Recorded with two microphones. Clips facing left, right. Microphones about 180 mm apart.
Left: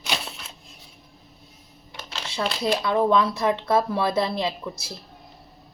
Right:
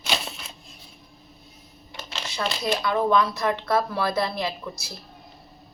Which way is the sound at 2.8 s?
25° left (ahead or behind).